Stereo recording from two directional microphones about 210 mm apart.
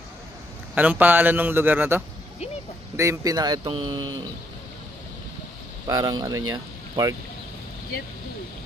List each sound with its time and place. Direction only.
0.7 s a man's voice: 10° right (ahead or behind)
5.9 s a man's voice: 15° right (ahead or behind)